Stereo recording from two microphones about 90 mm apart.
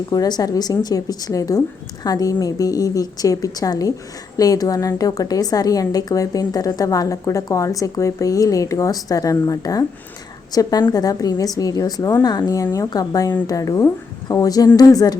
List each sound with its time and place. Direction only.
0.1 s a woman's voice: 50° left (ahead or behind)